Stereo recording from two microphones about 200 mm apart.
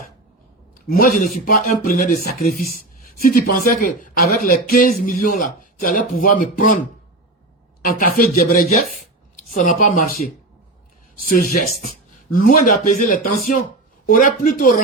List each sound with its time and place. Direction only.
0.9 s speech: 45° left (ahead or behind)
7.9 s speech: 45° left (ahead or behind)
11.2 s speech: 45° left (ahead or behind)